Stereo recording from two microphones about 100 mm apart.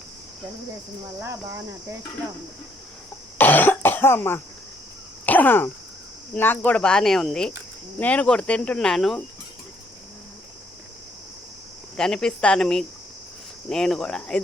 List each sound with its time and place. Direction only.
1.2 s cricket: 25° right (ahead or behind)
3.3 s cough: 20° left (ahead or behind)
6.3 s speech: 20° left (ahead or behind)
7.9 s speech: 15° left (ahead or behind)
11.9 s speech: 5° left (ahead or behind)